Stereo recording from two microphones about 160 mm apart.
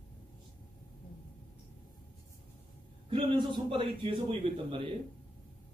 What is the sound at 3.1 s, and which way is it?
Speech, 30° right (ahead or behind).